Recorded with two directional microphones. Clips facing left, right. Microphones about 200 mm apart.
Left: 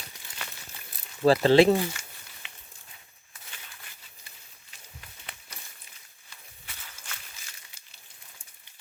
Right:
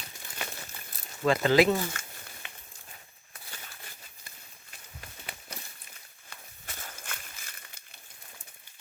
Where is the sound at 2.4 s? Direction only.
50° right (ahead or behind).